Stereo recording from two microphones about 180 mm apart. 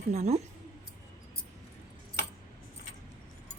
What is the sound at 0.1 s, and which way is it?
Speech, 40° right (ahead or behind).